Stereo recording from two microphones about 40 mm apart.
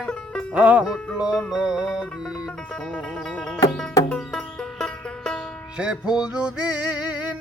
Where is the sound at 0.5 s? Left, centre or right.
Right.